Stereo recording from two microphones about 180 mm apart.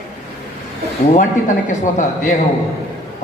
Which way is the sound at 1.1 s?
45° left (ahead or behind).